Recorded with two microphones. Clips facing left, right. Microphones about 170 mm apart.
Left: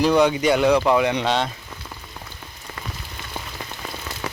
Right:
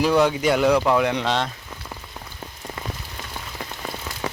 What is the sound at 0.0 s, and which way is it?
Speech, 5° right (ahead or behind).